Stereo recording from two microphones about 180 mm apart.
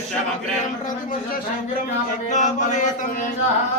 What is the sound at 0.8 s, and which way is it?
Speech, 50° left (ahead or behind).